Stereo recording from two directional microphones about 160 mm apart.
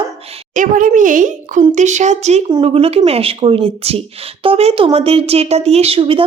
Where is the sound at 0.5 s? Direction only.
55° right (ahead or behind).